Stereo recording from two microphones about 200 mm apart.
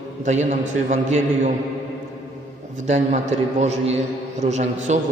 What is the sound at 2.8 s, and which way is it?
A man's voice, 35° right (ahead or behind).